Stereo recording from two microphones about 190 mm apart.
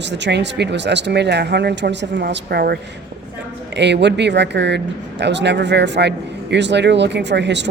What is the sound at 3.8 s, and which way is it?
A man's voice, 65° right (ahead or behind).